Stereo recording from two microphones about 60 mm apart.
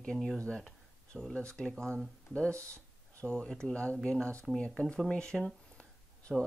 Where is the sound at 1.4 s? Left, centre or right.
Centre.